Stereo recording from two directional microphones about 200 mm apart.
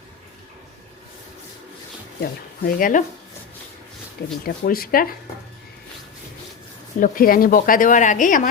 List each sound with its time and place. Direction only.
2.2 s speech: 45° left (ahead or behind)
4.4 s speech: 45° left (ahead or behind)
7.0 s speech: 45° left (ahead or behind)